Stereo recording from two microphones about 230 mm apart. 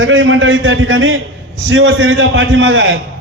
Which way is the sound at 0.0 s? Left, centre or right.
Right.